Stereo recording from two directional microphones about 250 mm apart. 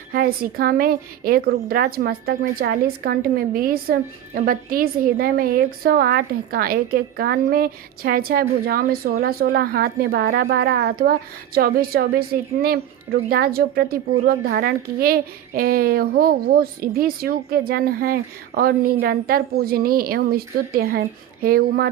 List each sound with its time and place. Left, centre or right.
0.1 s a woman's voice: right